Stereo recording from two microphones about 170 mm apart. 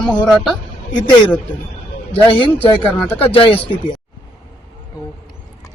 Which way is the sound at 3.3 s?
35° left (ahead or behind).